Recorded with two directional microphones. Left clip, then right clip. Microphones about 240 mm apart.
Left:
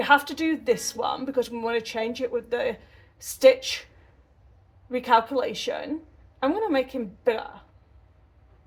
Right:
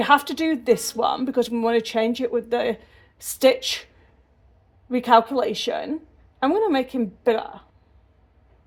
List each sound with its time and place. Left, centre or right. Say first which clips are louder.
0.0 s speech: right 2 dB; right
4.9 s speech: right 4 dB; right